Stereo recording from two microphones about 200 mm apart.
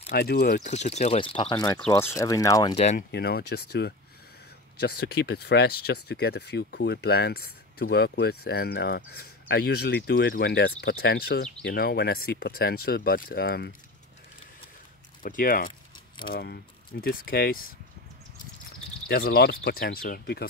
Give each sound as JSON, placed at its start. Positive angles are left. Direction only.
{"t": 0.1, "sound": "speech", "side_deg": 50}
{"t": 0.7, "sound": "speech", "side_deg": 35}
{"t": 2.8, "sound": "speech", "side_deg": 35}
{"t": 3.1, "sound": "speech", "side_deg": 50}
{"t": 15.2, "sound": "speech", "side_deg": 45}
{"t": 19.0, "sound": "speech", "side_deg": 50}